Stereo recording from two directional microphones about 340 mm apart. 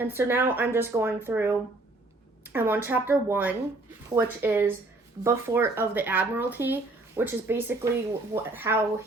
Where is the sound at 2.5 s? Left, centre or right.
Centre.